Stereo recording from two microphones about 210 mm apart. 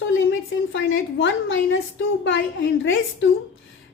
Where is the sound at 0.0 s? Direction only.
65° left (ahead or behind).